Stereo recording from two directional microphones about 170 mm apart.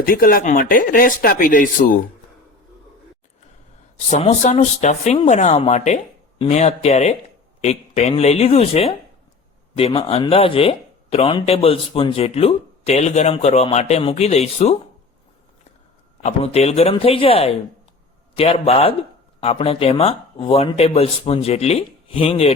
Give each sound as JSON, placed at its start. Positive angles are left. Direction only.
{"t": 0.0, "sound": "speech", "side_deg": 55}
{"t": 4.1, "sound": "speech", "side_deg": 40}
{"t": 16.2, "sound": "speech", "side_deg": 40}